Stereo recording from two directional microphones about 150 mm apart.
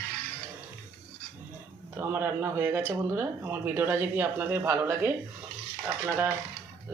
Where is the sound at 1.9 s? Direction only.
15° right (ahead or behind).